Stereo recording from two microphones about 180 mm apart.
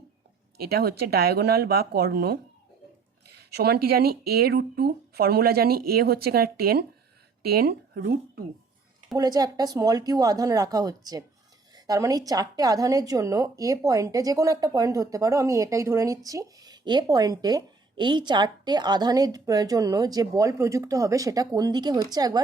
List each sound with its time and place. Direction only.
0.5 s speech: 60° right (ahead or behind)
9.1 s a woman's voice: 20° right (ahead or behind)